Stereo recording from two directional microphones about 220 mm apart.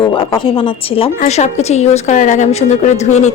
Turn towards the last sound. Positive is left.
turn(degrees=30)  # may be behind; listen again after turning